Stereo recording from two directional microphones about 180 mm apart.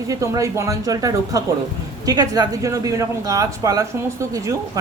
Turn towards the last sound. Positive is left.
turn(degrees=-15)  # may be behind; listen again after turning